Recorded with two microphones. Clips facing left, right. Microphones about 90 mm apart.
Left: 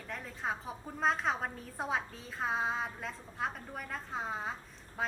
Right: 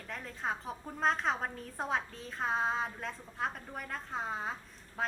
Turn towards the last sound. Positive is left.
turn(degrees=0)  # may be behind; listen again after turning